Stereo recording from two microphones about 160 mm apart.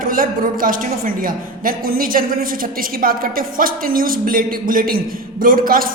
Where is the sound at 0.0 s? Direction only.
60° right (ahead or behind).